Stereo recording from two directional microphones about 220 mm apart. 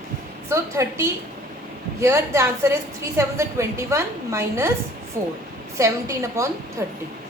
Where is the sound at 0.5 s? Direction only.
15° right (ahead or behind).